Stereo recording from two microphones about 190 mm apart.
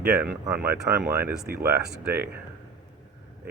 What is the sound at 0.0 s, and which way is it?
Speech, 10° right (ahead or behind).